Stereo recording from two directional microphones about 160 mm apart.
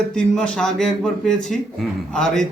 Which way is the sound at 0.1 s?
5° left (ahead or behind).